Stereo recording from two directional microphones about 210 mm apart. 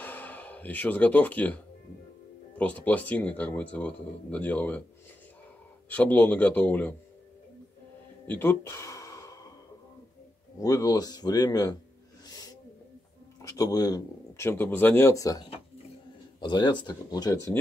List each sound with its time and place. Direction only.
0.0 s a sound: 10° left (ahead or behind)
2.5 s speech: 5° left (ahead or behind)
5.9 s speech: 10° left (ahead or behind)
8.3 s gasp: 10° left (ahead or behind)
10.6 s speech: 15° left (ahead or behind)
12.3 s snort: 15° left (ahead or behind)
13.4 s speech: 15° left (ahead or behind)